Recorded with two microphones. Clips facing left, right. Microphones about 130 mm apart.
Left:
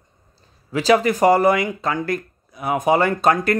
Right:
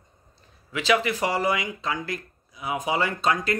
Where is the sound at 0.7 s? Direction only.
40° left (ahead or behind).